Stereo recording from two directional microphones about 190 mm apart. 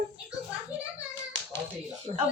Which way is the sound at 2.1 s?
35° right (ahead or behind).